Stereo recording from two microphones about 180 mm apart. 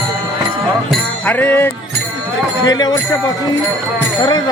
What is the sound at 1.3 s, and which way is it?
Music, 10° left (ahead or behind).